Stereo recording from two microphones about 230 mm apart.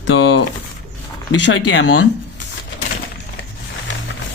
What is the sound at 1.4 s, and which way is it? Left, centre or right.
Speech, left.